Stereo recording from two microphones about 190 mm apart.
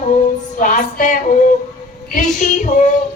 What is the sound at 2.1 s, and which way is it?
Female singing, 40° left (ahead or behind).